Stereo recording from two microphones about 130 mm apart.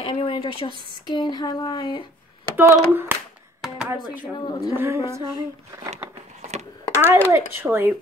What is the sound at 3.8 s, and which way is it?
Speech, 15° right (ahead or behind).